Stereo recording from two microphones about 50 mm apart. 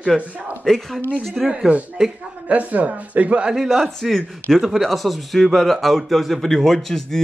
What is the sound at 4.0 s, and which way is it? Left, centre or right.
A man's voice, centre.